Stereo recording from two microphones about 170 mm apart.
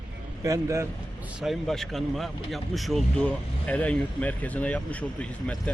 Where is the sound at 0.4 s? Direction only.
20° right (ahead or behind).